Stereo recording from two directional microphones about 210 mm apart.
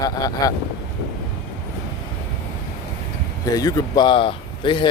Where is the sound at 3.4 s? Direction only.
15° left (ahead or behind).